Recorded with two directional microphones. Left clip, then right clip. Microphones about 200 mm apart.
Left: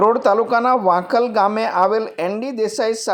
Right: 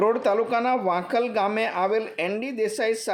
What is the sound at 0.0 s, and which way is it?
Speech, 15° left (ahead or behind).